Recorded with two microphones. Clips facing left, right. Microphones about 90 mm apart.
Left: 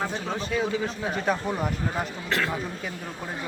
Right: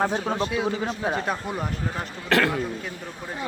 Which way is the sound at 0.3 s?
5° right (ahead or behind).